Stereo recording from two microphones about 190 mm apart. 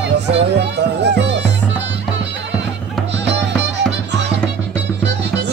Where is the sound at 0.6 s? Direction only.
65° right (ahead or behind).